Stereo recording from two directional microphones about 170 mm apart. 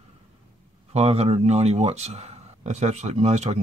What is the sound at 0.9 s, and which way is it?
Speech, 40° right (ahead or behind).